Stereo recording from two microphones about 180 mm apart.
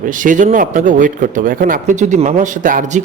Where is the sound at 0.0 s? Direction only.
45° right (ahead or behind).